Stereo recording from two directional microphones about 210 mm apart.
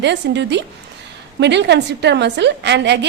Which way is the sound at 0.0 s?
55° right (ahead or behind).